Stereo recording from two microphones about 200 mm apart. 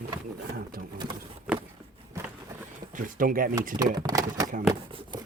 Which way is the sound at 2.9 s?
40° right (ahead or behind).